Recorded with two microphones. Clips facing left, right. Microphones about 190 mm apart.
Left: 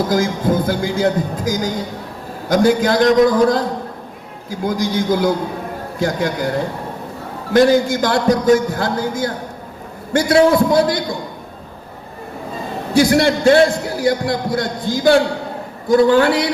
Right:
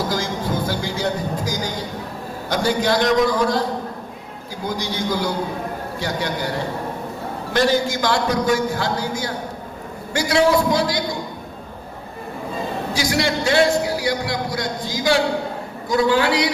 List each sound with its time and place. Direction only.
0.1 s a man's voice: 50° left (ahead or behind)
4.6 s a man's voice: 50° left (ahead or behind)
7.5 s a man's voice: 55° left (ahead or behind)
12.9 s a man's voice: 55° left (ahead or behind)